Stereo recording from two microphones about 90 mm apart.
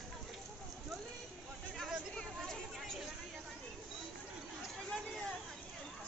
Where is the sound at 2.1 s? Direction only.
5° left (ahead or behind).